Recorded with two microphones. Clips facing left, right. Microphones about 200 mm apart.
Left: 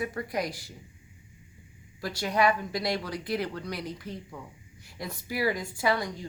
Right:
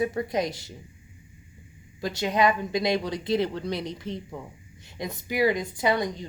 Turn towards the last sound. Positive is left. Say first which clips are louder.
# right 3 dB
turn(degrees=-20)  # may be behind; listen again after turning